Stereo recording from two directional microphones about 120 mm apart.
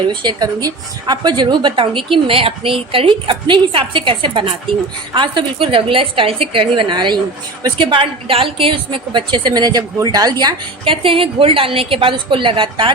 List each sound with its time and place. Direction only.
0.1 s a woman's voice: 40° right (ahead or behind)
10.8 s a woman's voice: 50° right (ahead or behind)